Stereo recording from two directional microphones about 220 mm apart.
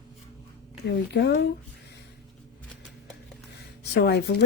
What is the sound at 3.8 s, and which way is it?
Speech, 50° left (ahead or behind).